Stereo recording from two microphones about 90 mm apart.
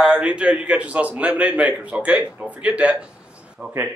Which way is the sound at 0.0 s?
10° right (ahead or behind).